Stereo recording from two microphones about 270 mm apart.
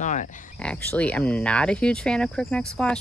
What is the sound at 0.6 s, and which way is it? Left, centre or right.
Speech, centre.